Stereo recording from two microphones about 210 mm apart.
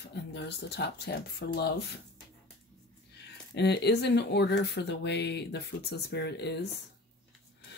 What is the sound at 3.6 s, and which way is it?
Speech, 50° left (ahead or behind).